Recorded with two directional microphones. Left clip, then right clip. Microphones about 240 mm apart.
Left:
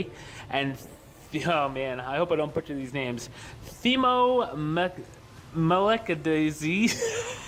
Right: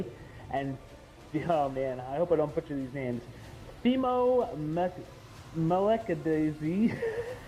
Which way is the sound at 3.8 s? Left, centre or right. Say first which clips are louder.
Left 5 dB; left.